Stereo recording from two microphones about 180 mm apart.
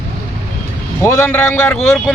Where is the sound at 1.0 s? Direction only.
15° left (ahead or behind).